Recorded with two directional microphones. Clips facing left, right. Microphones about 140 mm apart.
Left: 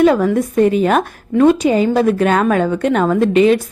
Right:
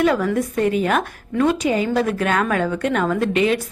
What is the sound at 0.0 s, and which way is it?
A woman's voice, 30° left (ahead or behind).